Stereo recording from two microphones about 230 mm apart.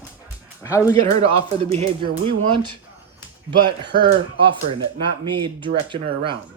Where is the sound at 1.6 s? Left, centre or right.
Right.